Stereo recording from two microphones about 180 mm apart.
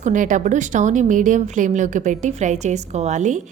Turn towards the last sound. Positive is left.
turn(degrees=-40)  # may be behind; listen again after turning